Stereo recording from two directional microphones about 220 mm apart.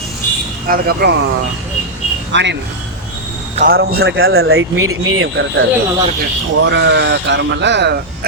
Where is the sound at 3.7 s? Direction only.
45° right (ahead or behind).